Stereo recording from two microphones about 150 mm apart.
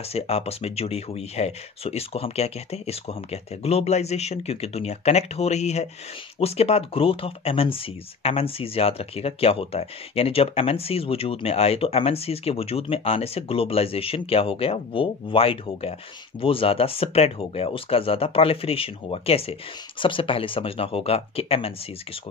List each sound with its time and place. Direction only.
0.1 s speech: 45° left (ahead or behind)